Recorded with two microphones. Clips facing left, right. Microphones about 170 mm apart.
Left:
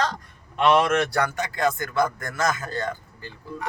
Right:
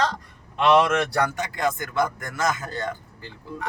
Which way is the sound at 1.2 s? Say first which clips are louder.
Even; 15° right (ahead or behind).